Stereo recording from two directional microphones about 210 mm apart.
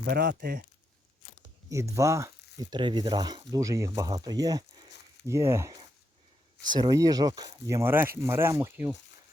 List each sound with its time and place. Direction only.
0.0 s speech: 50° right (ahead or behind)
1.7 s speech: 15° right (ahead or behind)